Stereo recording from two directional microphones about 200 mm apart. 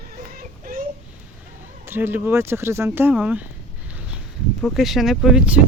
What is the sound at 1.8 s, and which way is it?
Speech, 10° right (ahead or behind).